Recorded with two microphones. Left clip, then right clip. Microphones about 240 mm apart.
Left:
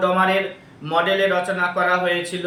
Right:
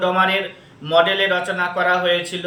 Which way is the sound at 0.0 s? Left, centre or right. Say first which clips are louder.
Even; centre.